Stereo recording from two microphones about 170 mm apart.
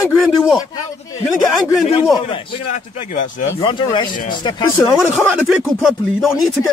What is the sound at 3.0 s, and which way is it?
Speech, 45° left (ahead or behind).